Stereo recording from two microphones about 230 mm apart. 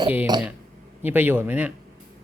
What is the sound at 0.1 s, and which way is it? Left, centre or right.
A child's voice, centre.